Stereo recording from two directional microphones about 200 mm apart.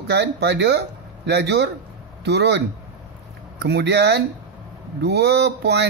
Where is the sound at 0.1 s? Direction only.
60° right (ahead or behind).